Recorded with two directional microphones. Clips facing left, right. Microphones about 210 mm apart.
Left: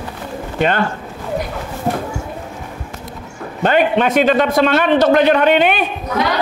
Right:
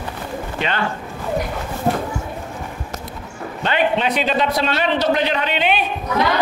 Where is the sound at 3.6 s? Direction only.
50° left (ahead or behind).